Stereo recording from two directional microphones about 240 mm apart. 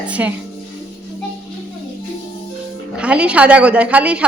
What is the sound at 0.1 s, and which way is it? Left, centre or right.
Speech, centre.